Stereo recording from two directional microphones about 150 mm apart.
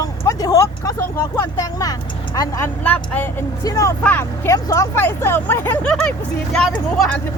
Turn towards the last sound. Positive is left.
turn(degrees=10)  # may be behind; listen again after turning